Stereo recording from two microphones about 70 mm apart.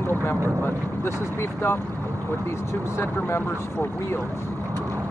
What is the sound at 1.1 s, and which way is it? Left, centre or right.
Speech, left.